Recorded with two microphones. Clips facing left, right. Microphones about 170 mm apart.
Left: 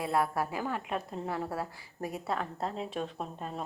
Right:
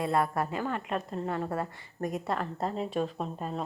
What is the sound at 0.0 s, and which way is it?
A woman's voice, centre (ahead or behind).